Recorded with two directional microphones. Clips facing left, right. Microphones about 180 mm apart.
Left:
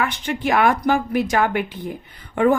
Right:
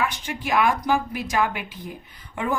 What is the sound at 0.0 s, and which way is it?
A woman's voice, 60° left (ahead or behind).